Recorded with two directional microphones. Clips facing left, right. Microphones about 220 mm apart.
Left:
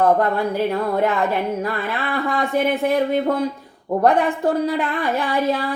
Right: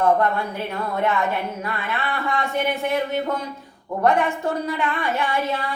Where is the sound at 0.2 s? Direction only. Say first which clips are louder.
Left 4 dB; 35° left (ahead or behind).